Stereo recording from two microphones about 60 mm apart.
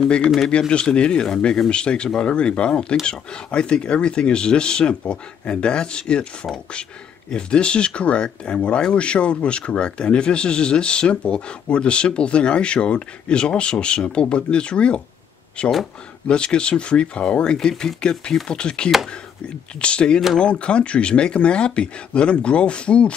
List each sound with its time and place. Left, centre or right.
0.5 s speech: centre